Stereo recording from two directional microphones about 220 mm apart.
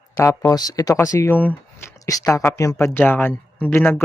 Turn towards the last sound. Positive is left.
turn(degrees=10)  # may be behind; listen again after turning